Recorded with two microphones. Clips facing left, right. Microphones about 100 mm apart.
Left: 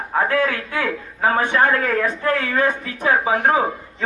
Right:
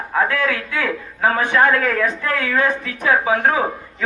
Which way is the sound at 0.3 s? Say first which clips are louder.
Left 1 dB; 35° left (ahead or behind).